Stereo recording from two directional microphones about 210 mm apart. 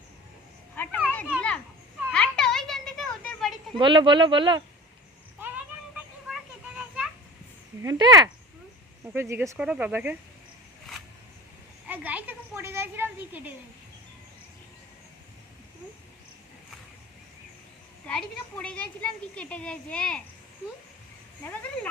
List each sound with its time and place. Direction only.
1.4 s children playing: 5° left (ahead or behind)
2.0 s a sound: 5° right (ahead or behind)
3.8 s speech: 20° right (ahead or behind)
5.4 s vehicle: 10° right (ahead or behind)
6.2 s children playing: 5° right (ahead or behind)
7.8 s speech: 15° right (ahead or behind)
11.9 s speech: 5° right (ahead or behind)
18.0 s speech: 5° left (ahead or behind)
21.4 s speech: 5° left (ahead or behind)